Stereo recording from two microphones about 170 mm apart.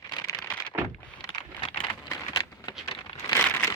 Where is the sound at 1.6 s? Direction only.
25° left (ahead or behind).